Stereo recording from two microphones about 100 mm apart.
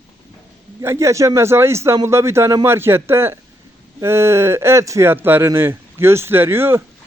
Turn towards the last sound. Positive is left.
turn(degrees=-25)  # may be behind; listen again after turning